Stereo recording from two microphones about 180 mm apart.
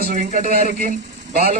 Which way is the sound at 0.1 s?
45° right (ahead or behind).